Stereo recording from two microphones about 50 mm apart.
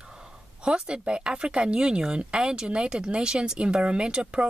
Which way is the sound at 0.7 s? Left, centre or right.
Centre.